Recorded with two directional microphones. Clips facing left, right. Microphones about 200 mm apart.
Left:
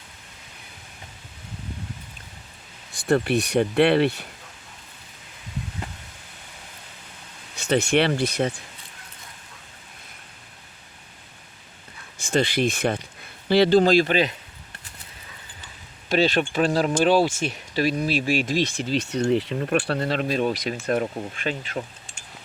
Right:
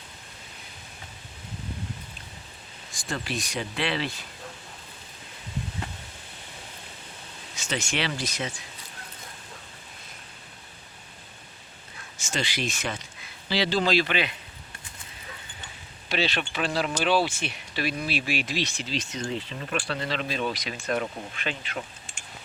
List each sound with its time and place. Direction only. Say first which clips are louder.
2.9 s speech: left 12 dB; 60° left (ahead or behind)
7.5 s speech: left 11 dB; 60° left (ahead or behind)
12.1 s speech: left 9 dB; 55° left (ahead or behind); by 14.3 s 40° left (ahead or behind)
16.0 s speech: left 8 dB; 45° left (ahead or behind)